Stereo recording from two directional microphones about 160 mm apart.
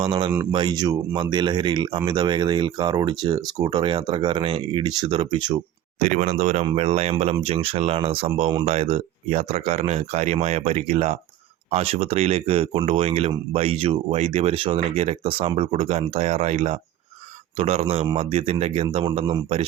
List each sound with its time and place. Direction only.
0.0 s speech: 25° right (ahead or behind)
6.0 s speech: 45° right (ahead or behind)